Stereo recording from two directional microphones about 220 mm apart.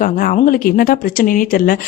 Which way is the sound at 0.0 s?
40° left (ahead or behind).